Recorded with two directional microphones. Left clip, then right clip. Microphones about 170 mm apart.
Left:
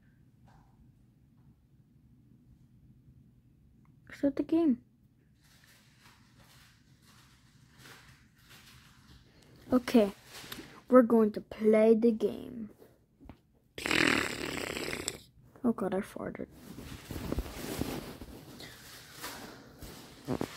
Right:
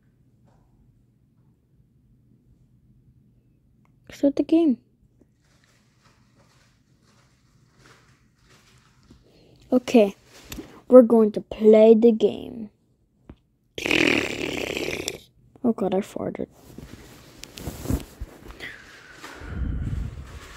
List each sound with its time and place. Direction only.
4.1 s a woman's voice: 25° right (ahead or behind)
9.7 s speech: 15° right (ahead or behind)
13.7 s snoring: 20° right (ahead or behind)